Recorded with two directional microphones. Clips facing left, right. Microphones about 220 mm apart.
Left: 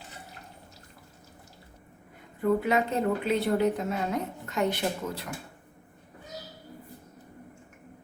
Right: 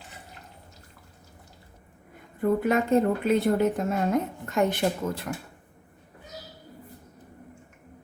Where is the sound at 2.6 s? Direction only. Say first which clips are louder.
Right 4 dB; 50° right (ahead or behind).